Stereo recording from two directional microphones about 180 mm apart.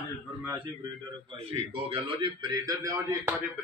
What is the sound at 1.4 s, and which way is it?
A man's voice, 30° right (ahead or behind).